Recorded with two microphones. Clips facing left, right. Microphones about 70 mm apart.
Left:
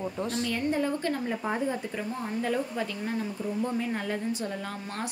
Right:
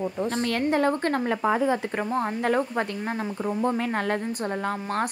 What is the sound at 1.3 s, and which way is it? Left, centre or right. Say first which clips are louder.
Speech: right 7 dB; right.